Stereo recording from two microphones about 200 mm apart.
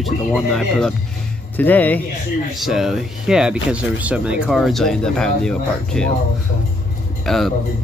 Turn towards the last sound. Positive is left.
turn(degrees=0)  # may be behind; listen again after turning